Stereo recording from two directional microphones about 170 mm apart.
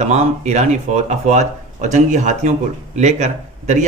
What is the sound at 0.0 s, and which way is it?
Speech, 40° right (ahead or behind).